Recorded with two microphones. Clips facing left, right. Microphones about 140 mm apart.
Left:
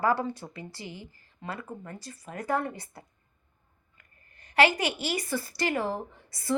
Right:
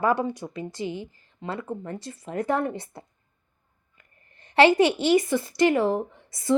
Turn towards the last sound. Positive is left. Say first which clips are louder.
# right 7 dB
turn(degrees=-25)  # may be behind; listen again after turning